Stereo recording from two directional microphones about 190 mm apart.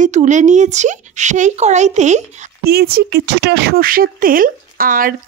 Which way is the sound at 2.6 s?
55° right (ahead or behind).